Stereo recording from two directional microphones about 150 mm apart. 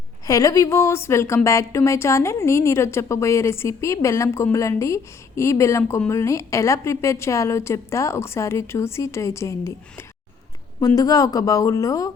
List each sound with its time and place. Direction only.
0.3 s a woman's voice: 25° left (ahead or behind)
10.8 s a woman's voice: 25° left (ahead or behind)